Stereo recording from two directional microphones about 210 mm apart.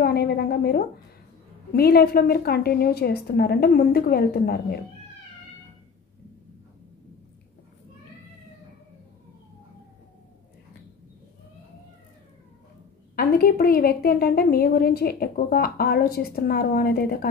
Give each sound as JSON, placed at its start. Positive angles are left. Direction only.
{"t": 0.0, "sound": "a sound", "side_deg": 50}
{"t": 1.7, "sound": "a woman's voice", "side_deg": 45}
{"t": 13.1, "sound": "a woman's voice", "side_deg": 45}